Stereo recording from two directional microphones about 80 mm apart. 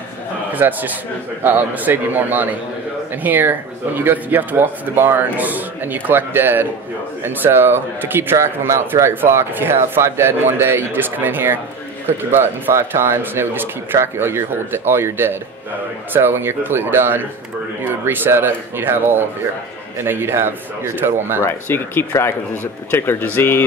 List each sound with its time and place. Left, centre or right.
0.5 s a man's voice: right
21.5 s speech: left